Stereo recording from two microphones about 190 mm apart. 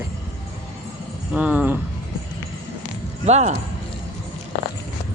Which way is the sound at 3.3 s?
35° right (ahead or behind).